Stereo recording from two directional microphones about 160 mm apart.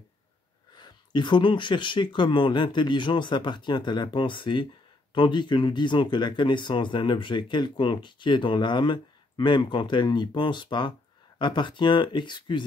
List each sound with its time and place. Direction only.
0.7 s speech: 30° left (ahead or behind)